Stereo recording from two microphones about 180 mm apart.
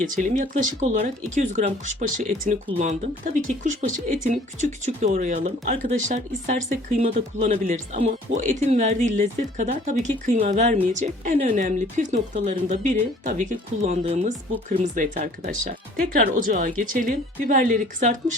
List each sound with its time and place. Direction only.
0.0 s speech: 45° right (ahead or behind)